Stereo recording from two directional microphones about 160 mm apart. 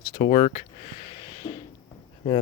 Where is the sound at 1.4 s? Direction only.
25° left (ahead or behind).